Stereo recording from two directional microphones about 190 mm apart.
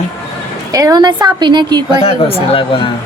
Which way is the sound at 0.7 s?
20° right (ahead or behind).